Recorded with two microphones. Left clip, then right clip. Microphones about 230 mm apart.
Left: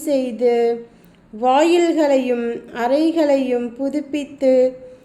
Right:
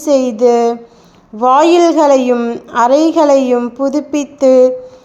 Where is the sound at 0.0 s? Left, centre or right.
Centre.